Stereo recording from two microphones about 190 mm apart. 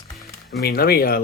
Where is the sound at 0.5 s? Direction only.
55° left (ahead or behind).